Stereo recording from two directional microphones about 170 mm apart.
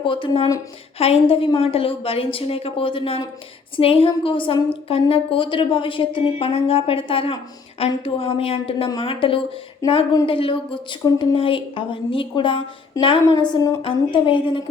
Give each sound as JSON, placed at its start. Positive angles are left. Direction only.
{"t": 0.0, "sound": "a woman's voice", "side_deg": 30}
{"t": 0.9, "sound": "a woman's voice", "side_deg": 35}
{"t": 13.5, "sound": "a woman's voice", "side_deg": 20}